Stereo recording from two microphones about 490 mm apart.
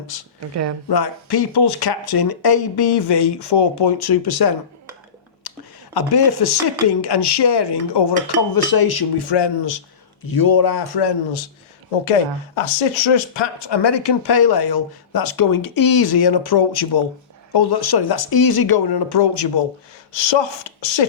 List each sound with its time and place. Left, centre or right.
0.3 s speech: right
0.9 s speech: left
10.2 s speech: left
12.5 s speech: left